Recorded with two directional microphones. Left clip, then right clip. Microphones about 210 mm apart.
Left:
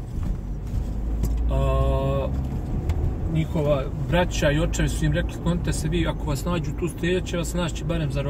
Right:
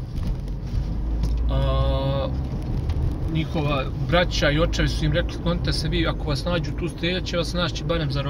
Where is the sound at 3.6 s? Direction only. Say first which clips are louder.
Left 2 dB; 30° right (ahead or behind).